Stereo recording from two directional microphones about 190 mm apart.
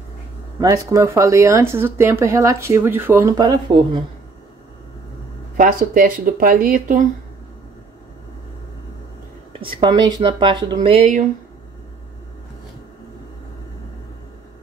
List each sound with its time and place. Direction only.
0.6 s speech: 15° right (ahead or behind)
5.6 s speech: 45° right (ahead or behind)
9.5 s speech: 25° right (ahead or behind)